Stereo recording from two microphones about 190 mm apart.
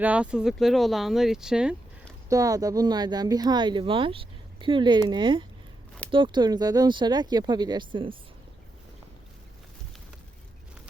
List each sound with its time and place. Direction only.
0.0 s speech: 5° right (ahead or behind)
2.3 s speech: 20° right (ahead or behind)